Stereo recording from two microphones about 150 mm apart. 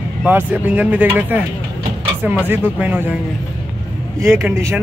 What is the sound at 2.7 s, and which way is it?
Speech, 10° right (ahead or behind).